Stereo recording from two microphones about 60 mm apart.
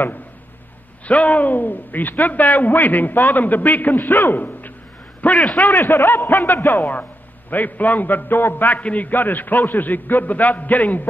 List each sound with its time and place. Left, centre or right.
1.0 s a man's voice: left
5.7 s a man's voice: left